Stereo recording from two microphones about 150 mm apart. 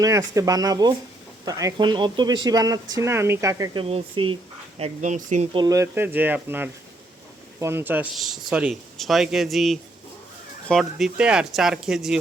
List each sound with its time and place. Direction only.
0.0 s speech: 20° right (ahead or behind)
3.8 s speech: 35° right (ahead or behind)
4.8 s speech: 55° right (ahead or behind)
5.5 s speech: 20° right (ahead or behind)
8.1 s speech: centre (ahead or behind)